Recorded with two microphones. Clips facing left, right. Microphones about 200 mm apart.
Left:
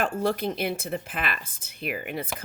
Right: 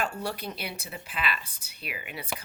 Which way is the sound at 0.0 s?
50° left (ahead or behind).